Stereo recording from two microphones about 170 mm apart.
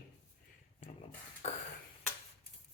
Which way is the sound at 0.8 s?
35° left (ahead or behind).